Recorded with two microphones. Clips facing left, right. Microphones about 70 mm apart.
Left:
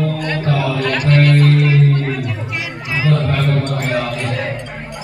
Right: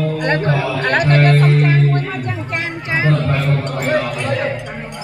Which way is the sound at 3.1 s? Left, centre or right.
Right.